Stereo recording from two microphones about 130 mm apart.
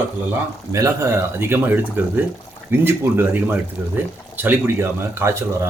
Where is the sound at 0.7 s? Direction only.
25° right (ahead or behind).